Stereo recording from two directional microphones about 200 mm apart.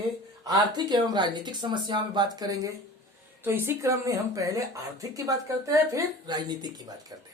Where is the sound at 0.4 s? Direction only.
20° right (ahead or behind).